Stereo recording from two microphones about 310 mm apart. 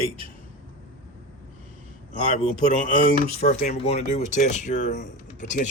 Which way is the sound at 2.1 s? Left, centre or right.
Left.